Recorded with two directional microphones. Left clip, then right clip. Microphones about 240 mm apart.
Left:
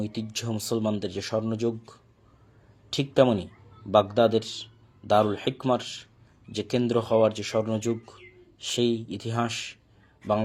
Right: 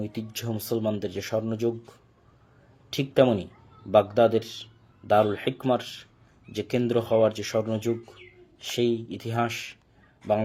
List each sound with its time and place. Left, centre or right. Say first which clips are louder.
0.0 s speech: left 1 dB; centre
3.2 s speech: even; centre